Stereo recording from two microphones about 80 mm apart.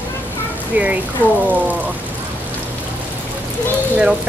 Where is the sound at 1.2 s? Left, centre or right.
Left.